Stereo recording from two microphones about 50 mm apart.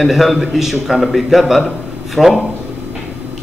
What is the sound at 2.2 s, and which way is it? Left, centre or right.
Speech, right.